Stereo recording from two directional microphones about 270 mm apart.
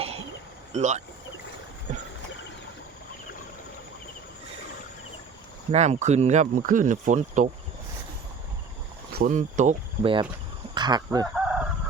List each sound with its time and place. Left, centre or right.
0.7 s speech: right
5.7 s speech: right
9.1 s speech: right
10.8 s goose: centre
11.3 s crowing: centre